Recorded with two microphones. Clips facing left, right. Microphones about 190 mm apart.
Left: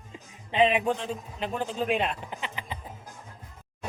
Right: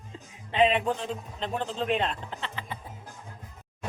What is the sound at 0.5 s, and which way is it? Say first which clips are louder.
Speech: even; 15° left (ahead or behind).